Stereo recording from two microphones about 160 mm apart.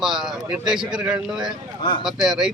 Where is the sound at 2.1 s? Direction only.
Centre (ahead or behind).